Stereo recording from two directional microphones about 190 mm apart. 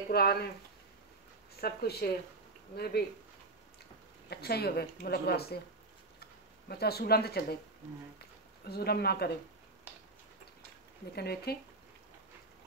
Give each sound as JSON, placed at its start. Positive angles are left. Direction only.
{"t": 0.1, "sound": "speech", "side_deg": 55}
{"t": 1.6, "sound": "speech", "side_deg": 55}
{"t": 4.3, "sound": "speech", "side_deg": 55}
{"t": 6.7, "sound": "speech", "side_deg": 55}
{"t": 8.6, "sound": "speech", "side_deg": 55}
{"t": 11.1, "sound": "speech", "side_deg": 55}